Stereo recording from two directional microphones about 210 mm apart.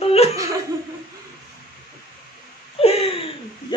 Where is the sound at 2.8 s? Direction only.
30° left (ahead or behind).